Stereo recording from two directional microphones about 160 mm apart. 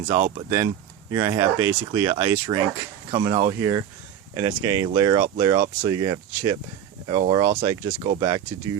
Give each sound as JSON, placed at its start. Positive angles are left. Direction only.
{"t": 0.1, "sound": "speech", "side_deg": -40}
{"t": 1.1, "sound": "speech", "side_deg": -20}